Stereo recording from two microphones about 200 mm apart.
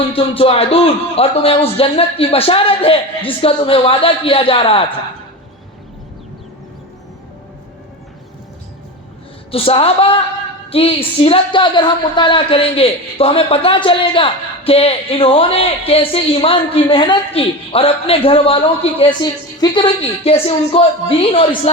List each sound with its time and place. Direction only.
0.1 s speech: 30° left (ahead or behind)
9.5 s speech: 30° left (ahead or behind)